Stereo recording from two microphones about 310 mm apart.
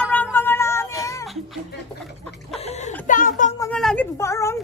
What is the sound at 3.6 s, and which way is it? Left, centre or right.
A woman's voice, centre.